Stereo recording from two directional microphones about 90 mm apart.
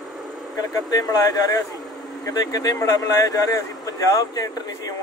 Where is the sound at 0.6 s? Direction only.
45° left (ahead or behind).